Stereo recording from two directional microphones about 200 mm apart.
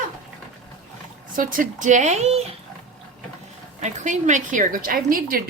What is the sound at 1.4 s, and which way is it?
A woman's voice, 45° right (ahead or behind).